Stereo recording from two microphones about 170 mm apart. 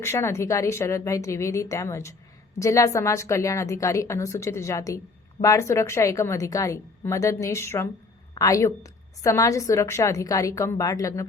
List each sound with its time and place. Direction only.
0.0 s a woman's voice: 15° left (ahead or behind)